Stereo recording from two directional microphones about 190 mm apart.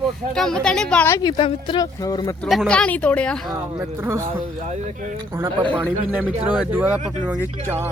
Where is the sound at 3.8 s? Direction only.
15° right (ahead or behind).